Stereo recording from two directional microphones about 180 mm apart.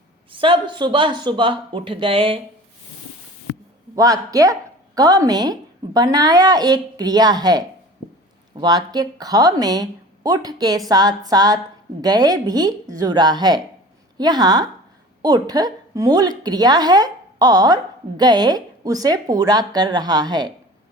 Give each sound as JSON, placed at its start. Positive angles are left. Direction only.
{"t": 0.3, "sound": "a woman's voice", "side_deg": -30}
{"t": 3.9, "sound": "a woman's voice", "side_deg": -20}